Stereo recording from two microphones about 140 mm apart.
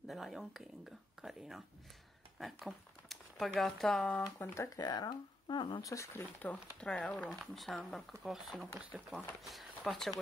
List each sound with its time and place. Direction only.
0.0 s speech: centre (ahead or behind)
4.4 s speech: 25° left (ahead or behind)
6.4 s speech: 10° left (ahead or behind)